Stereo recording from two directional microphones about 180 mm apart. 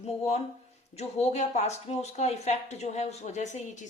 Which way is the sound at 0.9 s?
35° left (ahead or behind).